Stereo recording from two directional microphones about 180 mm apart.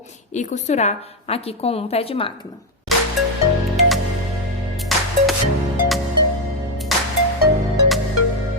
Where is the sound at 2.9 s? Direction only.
Centre (ahead or behind).